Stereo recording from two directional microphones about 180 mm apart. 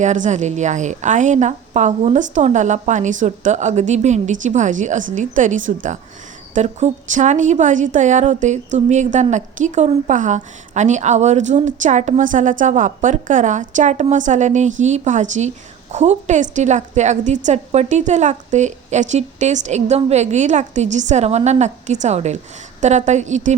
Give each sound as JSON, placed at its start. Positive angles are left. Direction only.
{"t": 0.0, "sound": "a woman's voice", "side_deg": -40}